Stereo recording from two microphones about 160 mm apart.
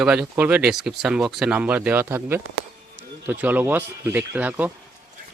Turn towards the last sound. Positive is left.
turn(degrees=-10)  # may be behind; listen again after turning